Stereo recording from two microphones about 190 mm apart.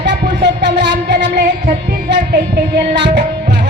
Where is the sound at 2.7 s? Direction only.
60° right (ahead or behind).